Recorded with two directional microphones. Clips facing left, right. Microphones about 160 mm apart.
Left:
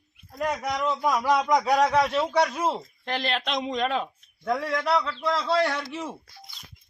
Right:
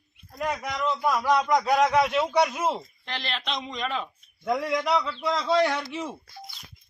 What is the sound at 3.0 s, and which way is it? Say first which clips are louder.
Speech: left 5 dB; 50° left (ahead or behind).